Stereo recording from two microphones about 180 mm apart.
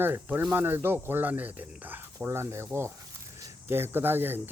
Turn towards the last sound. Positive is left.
turn(degrees=-10)  # may be behind; listen again after turning